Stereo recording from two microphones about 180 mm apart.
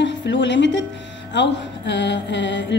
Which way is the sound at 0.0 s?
80° left.